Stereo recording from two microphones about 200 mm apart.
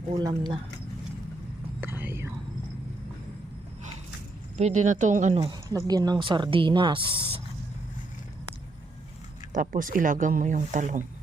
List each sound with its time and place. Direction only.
0.1 s speech: 20° right (ahead or behind)
1.8 s whispering: 10° right (ahead or behind)
4.5 s speech: 35° right (ahead or behind)
5.6 s speech: 20° right (ahead or behind)
9.5 s speech: 40° right (ahead or behind)